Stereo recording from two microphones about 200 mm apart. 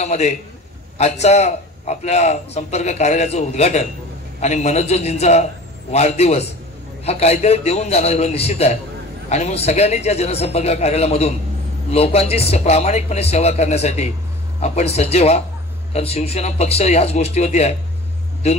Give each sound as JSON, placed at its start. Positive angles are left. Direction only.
{"t": 0.0, "sound": "a man's voice", "side_deg": 35}